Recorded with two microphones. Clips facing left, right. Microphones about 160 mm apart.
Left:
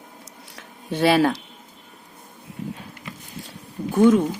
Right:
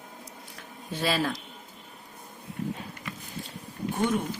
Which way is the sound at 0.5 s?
70° left (ahead or behind).